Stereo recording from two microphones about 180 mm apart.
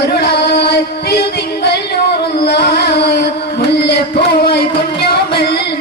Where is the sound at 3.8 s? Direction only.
65° left (ahead or behind).